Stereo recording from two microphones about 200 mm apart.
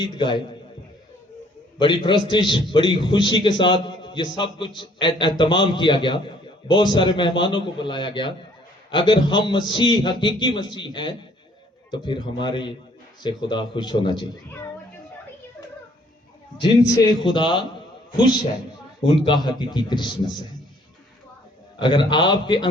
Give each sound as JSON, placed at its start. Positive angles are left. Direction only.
{"t": 0.0, "sound": "a man's voice", "side_deg": 25}
{"t": 2.0, "sound": "a man's voice", "side_deg": 25}
{"t": 16.6, "sound": "a man's voice", "side_deg": 20}
{"t": 19.0, "sound": "a man's voice", "side_deg": 25}
{"t": 21.8, "sound": "a man's voice", "side_deg": 20}